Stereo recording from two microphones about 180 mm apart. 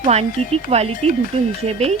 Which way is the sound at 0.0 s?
35° right (ahead or behind).